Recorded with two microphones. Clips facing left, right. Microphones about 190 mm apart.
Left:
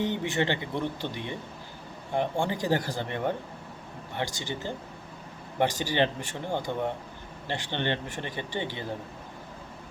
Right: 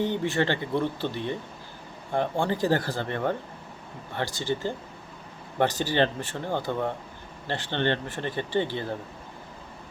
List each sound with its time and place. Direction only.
0.0 s speech: 20° left (ahead or behind)
2.4 s speech: 15° left (ahead or behind)